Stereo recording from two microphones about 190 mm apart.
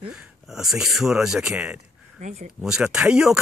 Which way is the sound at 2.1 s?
40° right (ahead or behind).